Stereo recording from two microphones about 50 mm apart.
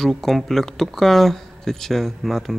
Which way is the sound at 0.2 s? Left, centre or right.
Centre.